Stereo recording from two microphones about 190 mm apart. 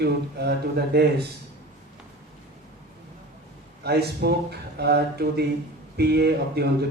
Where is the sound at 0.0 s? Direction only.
60° right (ahead or behind).